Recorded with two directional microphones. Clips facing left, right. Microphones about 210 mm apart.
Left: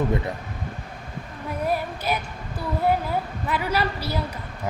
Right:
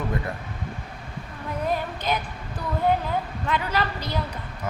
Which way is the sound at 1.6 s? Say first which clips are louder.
Left 1 dB; 10° left (ahead or behind).